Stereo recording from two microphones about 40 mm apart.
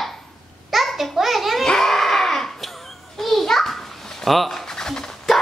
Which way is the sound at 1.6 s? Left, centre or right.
Centre.